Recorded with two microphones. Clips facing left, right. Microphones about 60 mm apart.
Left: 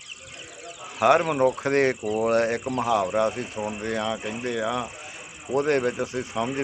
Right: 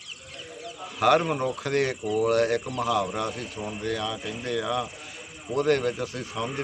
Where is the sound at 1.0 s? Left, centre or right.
Left.